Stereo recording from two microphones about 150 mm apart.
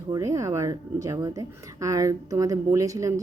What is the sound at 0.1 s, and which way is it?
Speech, 20° right (ahead or behind).